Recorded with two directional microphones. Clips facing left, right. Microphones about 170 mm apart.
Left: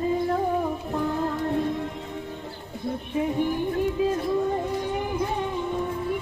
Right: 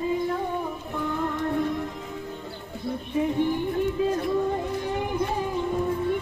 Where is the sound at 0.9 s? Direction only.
35° left (ahead or behind).